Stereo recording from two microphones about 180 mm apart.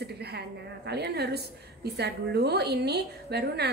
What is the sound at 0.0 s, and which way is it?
A woman's voice, 65° right (ahead or behind).